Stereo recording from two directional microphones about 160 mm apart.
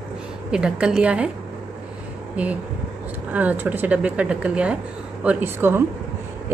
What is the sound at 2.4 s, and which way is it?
A woman's voice, 10° right (ahead or behind).